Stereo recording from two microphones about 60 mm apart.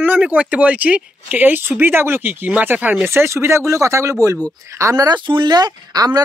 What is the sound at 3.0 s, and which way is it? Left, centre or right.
Speech, right.